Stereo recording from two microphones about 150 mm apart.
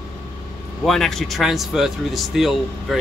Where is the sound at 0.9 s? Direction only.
Centre (ahead or behind).